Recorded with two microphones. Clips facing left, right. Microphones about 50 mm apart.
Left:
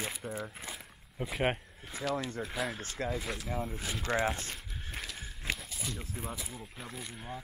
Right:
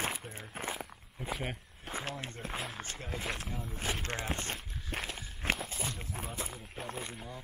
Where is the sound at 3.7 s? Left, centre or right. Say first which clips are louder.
Left 2 dB; right.